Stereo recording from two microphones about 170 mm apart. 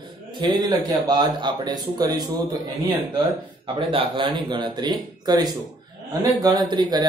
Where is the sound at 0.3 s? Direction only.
25° right (ahead or behind).